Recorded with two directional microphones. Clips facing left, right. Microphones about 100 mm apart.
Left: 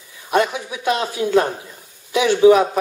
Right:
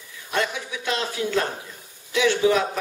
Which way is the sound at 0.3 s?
20° left (ahead or behind).